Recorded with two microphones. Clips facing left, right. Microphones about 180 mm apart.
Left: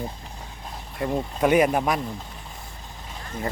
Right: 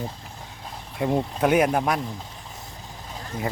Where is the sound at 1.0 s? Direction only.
20° right (ahead or behind).